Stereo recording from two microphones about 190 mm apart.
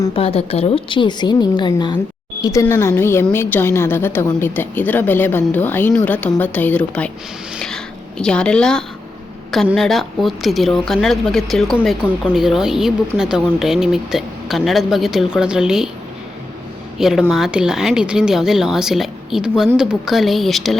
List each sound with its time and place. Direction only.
0.1 s a woman's voice: 30° left (ahead or behind); by 7.1 s 5° left (ahead or behind)
8.2 s a woman's voice: 5° left (ahead or behind)
17.0 s a woman's voice: centre (ahead or behind)